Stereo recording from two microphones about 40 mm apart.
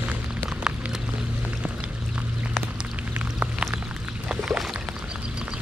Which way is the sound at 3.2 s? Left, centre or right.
Right.